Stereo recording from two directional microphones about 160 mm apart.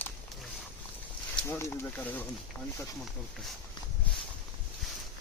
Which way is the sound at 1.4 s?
15° left (ahead or behind).